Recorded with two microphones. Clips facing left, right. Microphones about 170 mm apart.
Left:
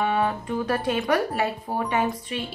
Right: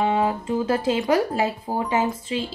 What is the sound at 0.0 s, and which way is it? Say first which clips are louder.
Speech: right 2 dB; 20° right (ahead or behind).